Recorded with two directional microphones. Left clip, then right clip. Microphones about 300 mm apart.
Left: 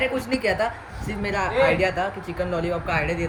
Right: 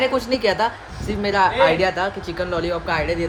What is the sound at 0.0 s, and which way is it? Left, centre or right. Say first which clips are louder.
Speech: right 5 dB; centre.